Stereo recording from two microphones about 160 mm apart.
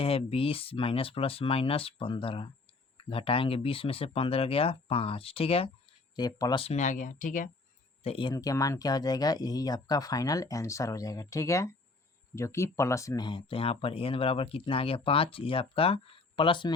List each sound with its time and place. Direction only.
0.0 s speech: 35° left (ahead or behind)
6.1 s speech: 25° left (ahead or behind)
6.7 s speech: 50° left (ahead or behind)
8.0 s speech: 30° left (ahead or behind)